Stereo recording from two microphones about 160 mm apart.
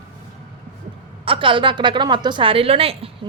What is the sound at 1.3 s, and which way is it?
A woman's voice, 30° right (ahead or behind).